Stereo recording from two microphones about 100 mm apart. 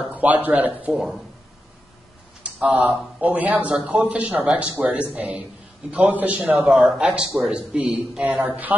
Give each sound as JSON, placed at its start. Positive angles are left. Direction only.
{"t": 0.1, "sound": "speech", "side_deg": -15}
{"t": 0.9, "sound": "speech", "side_deg": -5}
{"t": 2.4, "sound": "speech", "side_deg": -15}
{"t": 6.6, "sound": "speech", "side_deg": 0}